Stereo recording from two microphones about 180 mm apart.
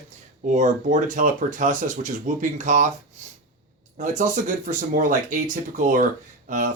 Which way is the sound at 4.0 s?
45° right (ahead or behind).